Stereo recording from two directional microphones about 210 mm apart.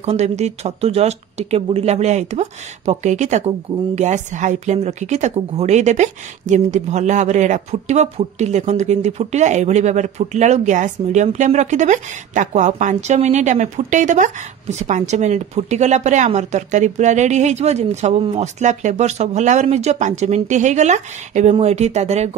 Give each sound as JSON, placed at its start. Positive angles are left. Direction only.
{"t": 0.0, "sound": "speech", "side_deg": -30}